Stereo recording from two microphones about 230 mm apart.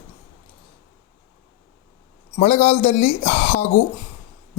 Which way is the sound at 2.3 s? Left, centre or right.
Left.